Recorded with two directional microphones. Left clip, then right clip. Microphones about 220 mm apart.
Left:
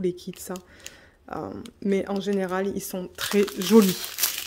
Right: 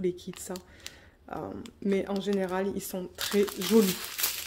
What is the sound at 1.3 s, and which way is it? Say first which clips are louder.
Speech: left 4 dB; 20° left (ahead or behind).